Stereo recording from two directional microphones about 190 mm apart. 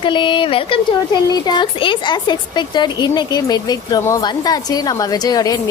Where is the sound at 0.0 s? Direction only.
25° left (ahead or behind).